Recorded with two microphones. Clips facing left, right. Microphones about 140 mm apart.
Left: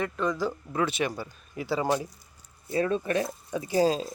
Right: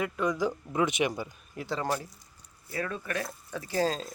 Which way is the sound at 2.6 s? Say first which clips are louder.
Left 8 dB; 25° left (ahead or behind).